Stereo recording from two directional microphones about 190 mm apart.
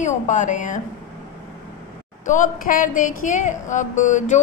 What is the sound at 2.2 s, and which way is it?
A woman's voice, 40° left (ahead or behind).